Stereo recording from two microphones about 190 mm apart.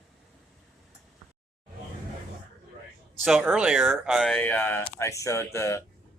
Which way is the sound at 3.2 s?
5° right (ahead or behind).